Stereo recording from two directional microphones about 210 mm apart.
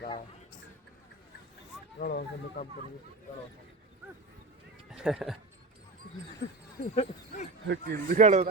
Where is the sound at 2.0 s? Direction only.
50° left (ahead or behind).